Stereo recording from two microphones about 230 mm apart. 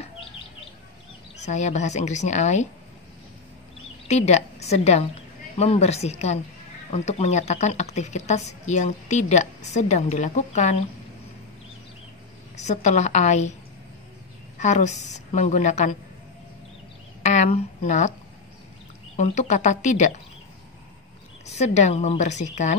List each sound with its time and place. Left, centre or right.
1.4 s a woman's voice: left
4.1 s a woman's voice: left
12.5 s a woman's voice: left
14.6 s a woman's voice: left
17.2 s a sound: left
19.1 s a woman's voice: left
21.5 s a woman's voice: left